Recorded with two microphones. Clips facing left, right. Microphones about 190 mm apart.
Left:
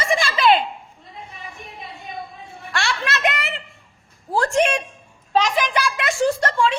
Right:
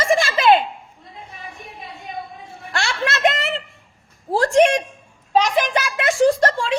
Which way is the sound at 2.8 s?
25° right (ahead or behind).